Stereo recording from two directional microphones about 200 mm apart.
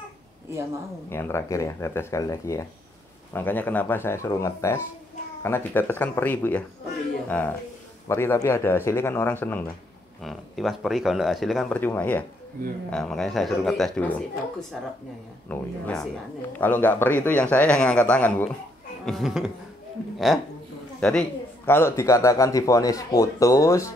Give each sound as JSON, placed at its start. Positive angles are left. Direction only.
{"t": 1.1, "sound": "a man's voice", "side_deg": 10}
{"t": 21.0, "sound": "a man's voice", "side_deg": 5}